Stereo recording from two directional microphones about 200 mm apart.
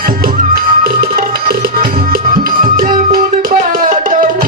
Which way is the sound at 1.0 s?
45° right (ahead or behind).